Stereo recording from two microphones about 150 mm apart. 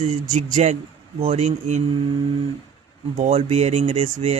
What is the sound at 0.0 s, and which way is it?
Speech, 55° right (ahead or behind).